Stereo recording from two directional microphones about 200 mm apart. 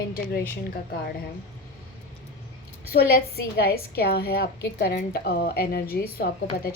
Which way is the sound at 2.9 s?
50° left (ahead or behind).